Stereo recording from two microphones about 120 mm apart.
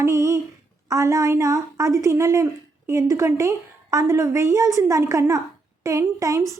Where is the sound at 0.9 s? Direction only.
25° right (ahead or behind).